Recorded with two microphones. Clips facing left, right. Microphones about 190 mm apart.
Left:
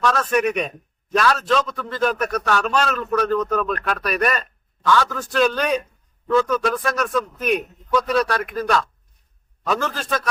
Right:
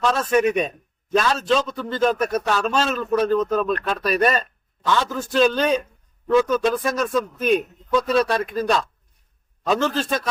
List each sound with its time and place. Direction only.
0.0 s a man's voice: 25° right (ahead or behind)